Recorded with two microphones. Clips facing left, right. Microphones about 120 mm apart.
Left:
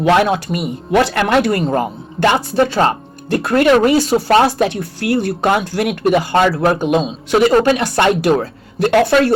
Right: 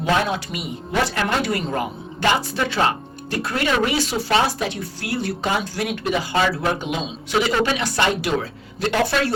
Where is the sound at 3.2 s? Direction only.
55° left (ahead or behind).